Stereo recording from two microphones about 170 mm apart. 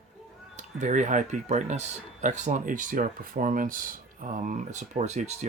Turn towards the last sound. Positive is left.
turn(degrees=-40)  # may be behind; listen again after turning